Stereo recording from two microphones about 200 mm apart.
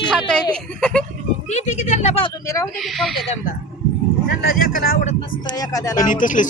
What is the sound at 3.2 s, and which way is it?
Speech, 30° left (ahead or behind).